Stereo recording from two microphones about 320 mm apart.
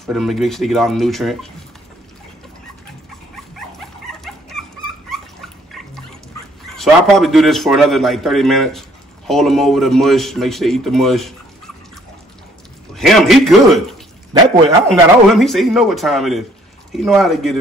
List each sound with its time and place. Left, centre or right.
0.0 s a man's voice: centre
4.2 s dog: centre
6.7 s a man's voice: centre
12.9 s a man's voice: centre
14.9 s a man's voice: centre